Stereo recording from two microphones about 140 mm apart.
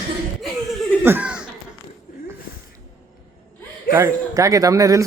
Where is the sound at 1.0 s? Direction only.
10° right (ahead or behind).